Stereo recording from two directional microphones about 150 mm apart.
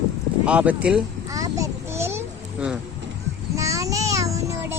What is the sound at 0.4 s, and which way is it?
Speech, 10° right (ahead or behind).